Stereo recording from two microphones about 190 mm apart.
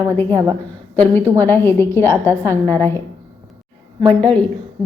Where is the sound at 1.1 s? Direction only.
10° left (ahead or behind).